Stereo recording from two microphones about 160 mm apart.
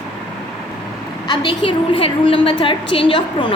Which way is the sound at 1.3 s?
30° left (ahead or behind).